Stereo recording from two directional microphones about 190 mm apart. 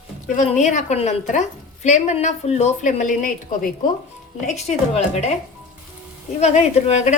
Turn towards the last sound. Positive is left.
turn(degrees=35)  # may be behind; listen again after turning